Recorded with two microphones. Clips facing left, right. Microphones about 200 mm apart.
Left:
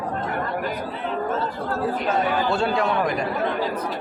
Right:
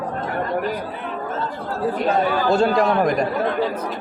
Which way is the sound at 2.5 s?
40° right (ahead or behind).